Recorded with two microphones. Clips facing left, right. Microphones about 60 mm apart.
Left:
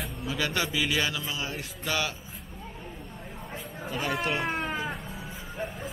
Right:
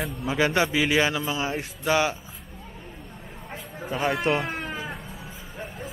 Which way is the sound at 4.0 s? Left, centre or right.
Centre.